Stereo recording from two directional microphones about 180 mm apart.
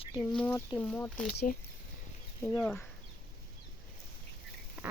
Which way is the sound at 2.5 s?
5° left (ahead or behind).